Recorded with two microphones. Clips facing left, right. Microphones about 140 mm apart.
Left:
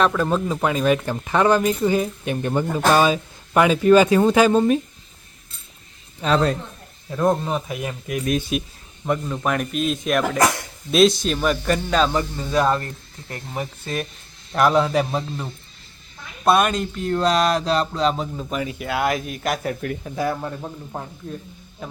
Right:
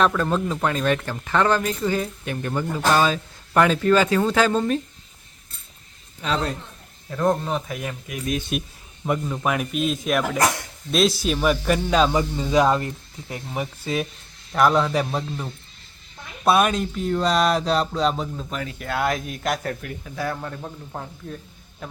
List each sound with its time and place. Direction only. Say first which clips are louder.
0.0 s speech: left 1 dB; 5° left (ahead or behind)
6.2 s speech: left 5 dB; 30° left (ahead or behind)
7.1 s speech: left 2 dB; 10° left (ahead or behind)
8.5 s speech: left 2 dB; centre (ahead or behind)
20.1 s speech: left 2 dB; 15° left (ahead or behind)